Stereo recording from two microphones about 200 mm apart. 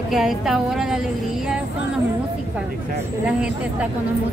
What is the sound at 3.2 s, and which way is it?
Speech, 5° right (ahead or behind).